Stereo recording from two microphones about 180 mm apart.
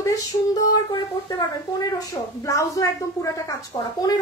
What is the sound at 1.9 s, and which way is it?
A woman's voice, 20° left (ahead or behind).